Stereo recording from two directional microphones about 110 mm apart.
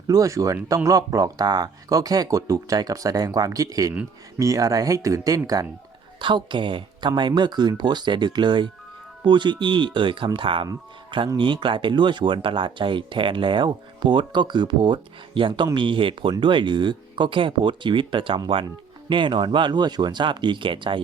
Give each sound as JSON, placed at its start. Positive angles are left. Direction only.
{"t": 0.1, "sound": "speech", "side_deg": -30}
{"t": 6.1, "sound": "speech", "side_deg": -45}